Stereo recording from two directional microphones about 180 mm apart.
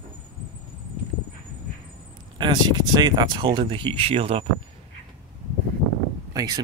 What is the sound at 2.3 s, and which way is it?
Speech, 25° right (ahead or behind).